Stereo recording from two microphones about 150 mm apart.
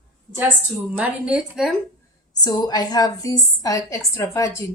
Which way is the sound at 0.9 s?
10° right (ahead or behind).